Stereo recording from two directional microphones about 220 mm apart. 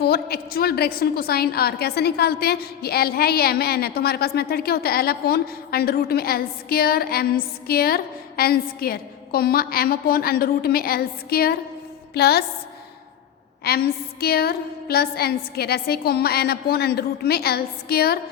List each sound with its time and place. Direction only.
0.0 s a woman's voice: 45° left (ahead or behind)
13.7 s a woman's voice: 45° left (ahead or behind)